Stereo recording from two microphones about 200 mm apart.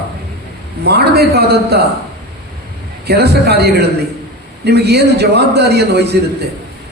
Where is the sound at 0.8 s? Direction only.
55° right (ahead or behind).